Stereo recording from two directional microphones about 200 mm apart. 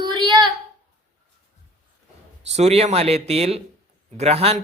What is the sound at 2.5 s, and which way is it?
Speech, 30° right (ahead or behind).